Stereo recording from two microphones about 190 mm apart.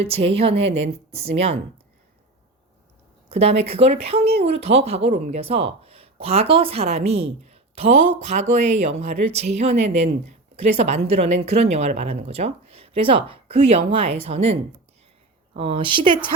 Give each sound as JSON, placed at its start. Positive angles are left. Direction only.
{"t": 0.0, "sound": "speech", "side_deg": -30}
{"t": 3.2, "sound": "a woman's voice", "side_deg": -35}